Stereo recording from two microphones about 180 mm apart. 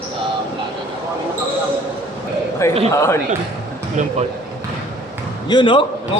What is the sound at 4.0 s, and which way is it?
Speech, 45° right (ahead or behind).